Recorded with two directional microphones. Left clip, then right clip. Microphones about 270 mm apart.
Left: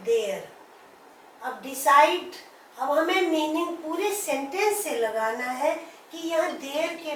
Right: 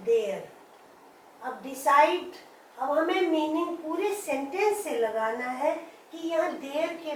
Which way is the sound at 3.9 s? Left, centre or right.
Centre.